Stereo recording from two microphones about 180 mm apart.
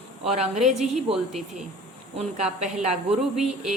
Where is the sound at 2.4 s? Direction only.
5° right (ahead or behind).